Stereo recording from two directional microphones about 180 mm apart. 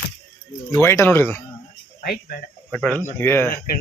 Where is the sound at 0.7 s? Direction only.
15° left (ahead or behind).